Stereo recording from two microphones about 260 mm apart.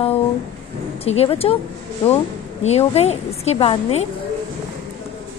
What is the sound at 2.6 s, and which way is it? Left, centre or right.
A woman's voice, left.